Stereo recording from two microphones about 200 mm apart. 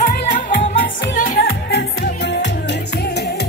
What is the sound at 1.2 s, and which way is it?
Music, 45° left (ahead or behind).